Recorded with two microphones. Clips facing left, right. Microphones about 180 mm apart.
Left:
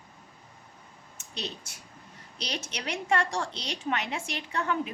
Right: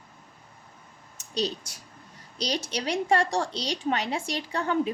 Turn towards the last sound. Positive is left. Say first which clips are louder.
# right 4 dB
turn(degrees=-35)  # may be behind; listen again after turning